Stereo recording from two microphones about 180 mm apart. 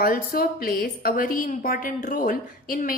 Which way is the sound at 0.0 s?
55° left (ahead or behind).